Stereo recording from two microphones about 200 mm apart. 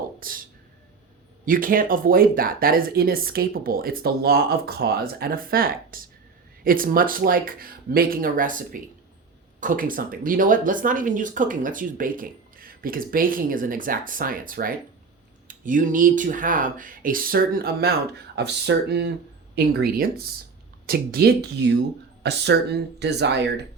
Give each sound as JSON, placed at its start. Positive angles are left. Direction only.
{"t": 0.2, "sound": "speech", "side_deg": -45}
{"t": 1.5, "sound": "speech", "side_deg": -45}